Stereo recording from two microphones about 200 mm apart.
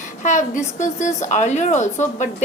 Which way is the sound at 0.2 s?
40° left (ahead or behind).